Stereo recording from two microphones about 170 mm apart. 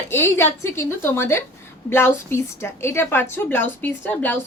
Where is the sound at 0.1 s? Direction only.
15° left (ahead or behind).